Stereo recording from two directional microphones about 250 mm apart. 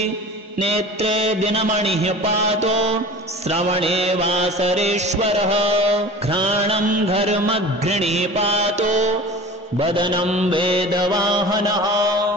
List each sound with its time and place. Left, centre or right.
0.6 s mantra: right